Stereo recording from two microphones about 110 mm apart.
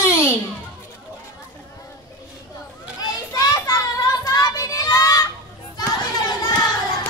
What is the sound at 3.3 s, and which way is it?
Child singing, 35° left (ahead or behind).